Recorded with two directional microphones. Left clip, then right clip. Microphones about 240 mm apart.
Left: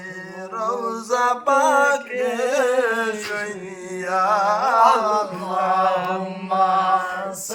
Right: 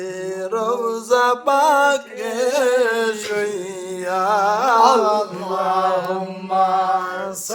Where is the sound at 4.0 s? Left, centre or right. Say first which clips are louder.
Right 1 dB; right.